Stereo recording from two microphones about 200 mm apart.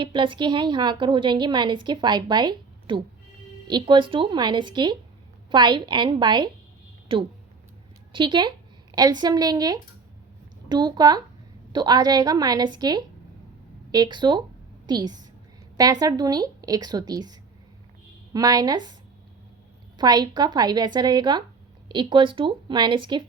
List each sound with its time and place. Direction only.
0.0 s a woman's voice: 25° right (ahead or behind)
8.1 s a woman's voice: 25° right (ahead or behind)
18.3 s a woman's voice: 20° right (ahead or behind)
20.0 s a woman's voice: 20° right (ahead or behind)